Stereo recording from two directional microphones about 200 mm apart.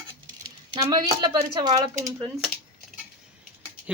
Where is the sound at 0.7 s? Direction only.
20° right (ahead or behind).